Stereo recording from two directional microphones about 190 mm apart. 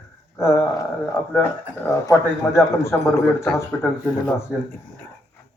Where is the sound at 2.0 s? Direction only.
15° left (ahead or behind).